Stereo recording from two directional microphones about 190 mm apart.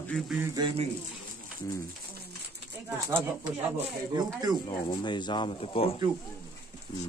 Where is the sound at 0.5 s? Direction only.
25° right (ahead or behind).